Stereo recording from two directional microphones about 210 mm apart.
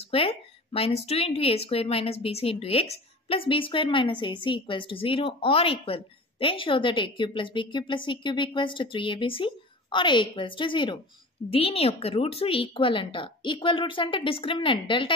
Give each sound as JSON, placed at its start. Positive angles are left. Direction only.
{"t": 0.1, "sound": "a woman's voice", "side_deg": 25}